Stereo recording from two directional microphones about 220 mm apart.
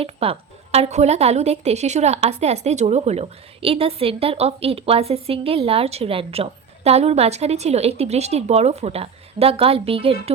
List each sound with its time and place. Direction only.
0.0 s a woman's voice: 25° right (ahead or behind)